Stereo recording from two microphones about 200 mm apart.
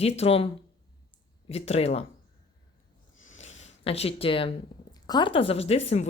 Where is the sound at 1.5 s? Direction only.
30° left (ahead or behind).